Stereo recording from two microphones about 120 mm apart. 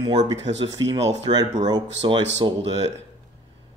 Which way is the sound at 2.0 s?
40° right (ahead or behind).